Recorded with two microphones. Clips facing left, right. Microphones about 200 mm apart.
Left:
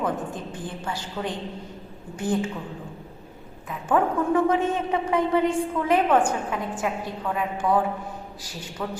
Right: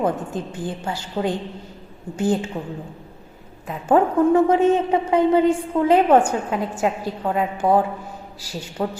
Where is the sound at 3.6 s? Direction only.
30° right (ahead or behind).